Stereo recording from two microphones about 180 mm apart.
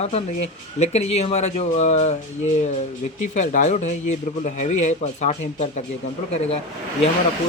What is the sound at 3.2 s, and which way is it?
Speech, 45° left (ahead or behind).